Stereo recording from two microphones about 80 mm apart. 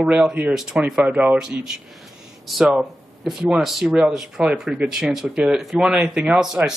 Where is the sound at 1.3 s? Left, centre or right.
Centre.